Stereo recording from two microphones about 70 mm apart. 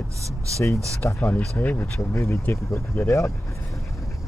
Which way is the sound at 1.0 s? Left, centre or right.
Left.